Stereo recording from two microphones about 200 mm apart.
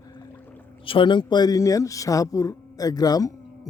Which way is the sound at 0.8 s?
25° left (ahead or behind).